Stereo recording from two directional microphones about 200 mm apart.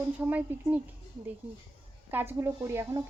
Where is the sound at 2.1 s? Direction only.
10° right (ahead or behind).